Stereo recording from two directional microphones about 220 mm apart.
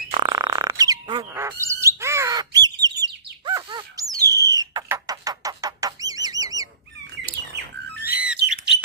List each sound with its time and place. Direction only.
0.1 s bird: 20° right (ahead or behind)
2.8 s chirp: 15° right (ahead or behind)
8.0 s bird: 5° right (ahead or behind)